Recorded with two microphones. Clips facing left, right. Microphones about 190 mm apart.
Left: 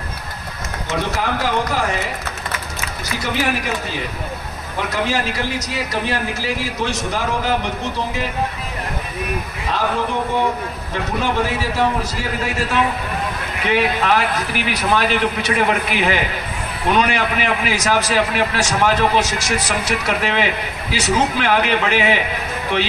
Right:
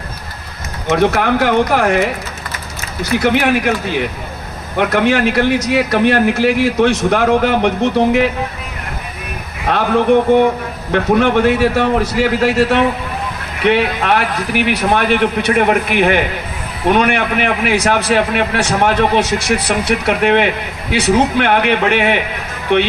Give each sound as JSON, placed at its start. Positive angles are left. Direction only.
{"t": 0.8, "sound": "a man's voice", "side_deg": -65}
{"t": 3.2, "sound": "a man's voice", "side_deg": -65}
{"t": 9.7, "sound": "a man's voice", "side_deg": -65}